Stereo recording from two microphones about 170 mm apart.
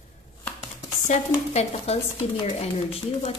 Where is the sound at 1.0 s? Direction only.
40° left (ahead or behind).